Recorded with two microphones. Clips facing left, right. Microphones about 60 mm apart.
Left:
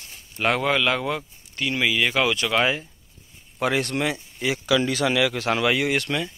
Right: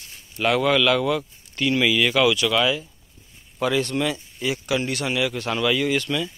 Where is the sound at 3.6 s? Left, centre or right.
Left.